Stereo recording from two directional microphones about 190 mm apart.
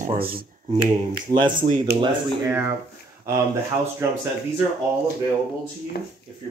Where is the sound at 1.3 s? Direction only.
20° right (ahead or behind).